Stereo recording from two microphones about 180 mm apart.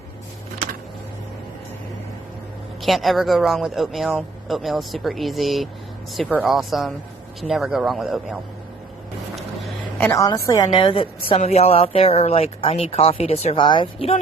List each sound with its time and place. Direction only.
2.8 s speech: centre (ahead or behind)
9.3 s a sound: centre (ahead or behind)
10.1 s a woman's voice: 20° left (ahead or behind)